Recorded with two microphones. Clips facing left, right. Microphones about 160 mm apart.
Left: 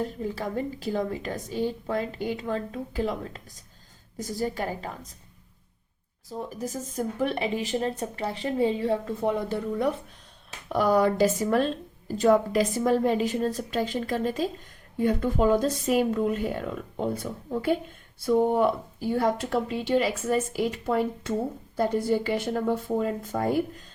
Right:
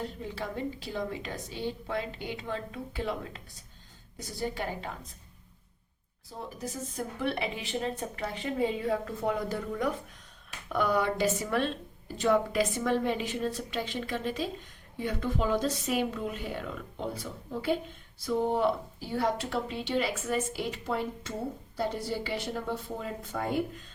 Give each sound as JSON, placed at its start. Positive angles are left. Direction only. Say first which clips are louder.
{"t": 0.0, "sound": "a woman's voice", "louder": "left 6 dB", "side_deg": 45}
{"t": 7.2, "sound": "a woman's voice", "louder": "left 5 dB", "side_deg": 40}